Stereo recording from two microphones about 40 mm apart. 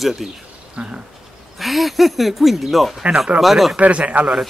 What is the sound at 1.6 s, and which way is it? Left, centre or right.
A man's voice, centre.